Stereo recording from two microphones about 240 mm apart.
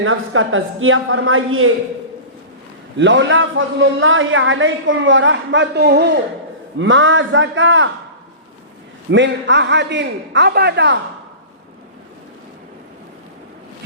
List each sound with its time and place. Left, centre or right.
0.0 s a woman's voice: right
3.0 s a man's voice: right
9.0 s a man's voice: right